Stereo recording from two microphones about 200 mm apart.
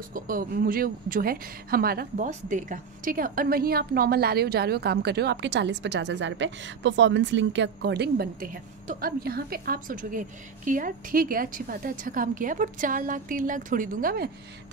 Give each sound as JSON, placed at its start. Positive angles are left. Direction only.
{"t": 0.1, "sound": "a woman's voice", "side_deg": -45}